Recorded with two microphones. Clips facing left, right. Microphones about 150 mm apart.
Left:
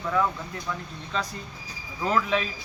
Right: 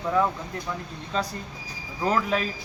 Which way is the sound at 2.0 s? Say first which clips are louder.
Even; 40° right (ahead or behind).